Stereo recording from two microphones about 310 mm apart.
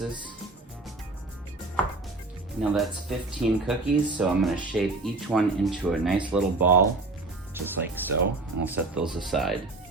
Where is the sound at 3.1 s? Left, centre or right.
Centre.